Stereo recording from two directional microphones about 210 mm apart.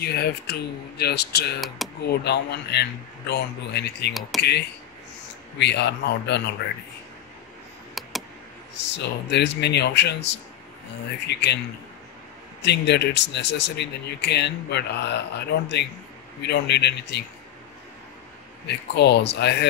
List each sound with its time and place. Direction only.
0.0 s a man's voice: 50° left (ahead or behind)
8.0 s a sound: centre (ahead or behind)
8.7 s a man's voice: 55° left (ahead or behind)
12.6 s speech: 55° left (ahead or behind)
16.4 s a man's voice: 55° left (ahead or behind)
18.7 s a man's voice: 55° left (ahead or behind)